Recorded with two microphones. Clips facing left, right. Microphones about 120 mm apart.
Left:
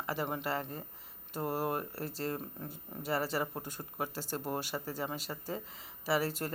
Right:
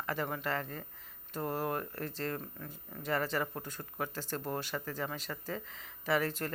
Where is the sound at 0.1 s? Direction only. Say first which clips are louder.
Even; 5° left (ahead or behind).